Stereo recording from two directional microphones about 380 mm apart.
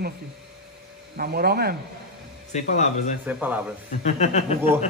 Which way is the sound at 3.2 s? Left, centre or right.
Centre.